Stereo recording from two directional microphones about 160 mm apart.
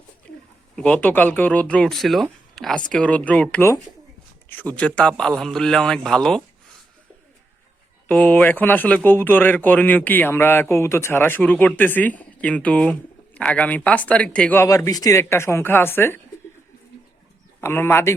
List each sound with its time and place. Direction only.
0.8 s a man's voice: 5° left (ahead or behind)
8.0 s speech: 10° left (ahead or behind)
17.6 s speech: 15° left (ahead or behind)